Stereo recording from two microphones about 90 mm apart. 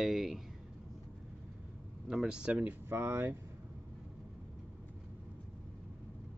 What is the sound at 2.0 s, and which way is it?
Speech, 10° right (ahead or behind).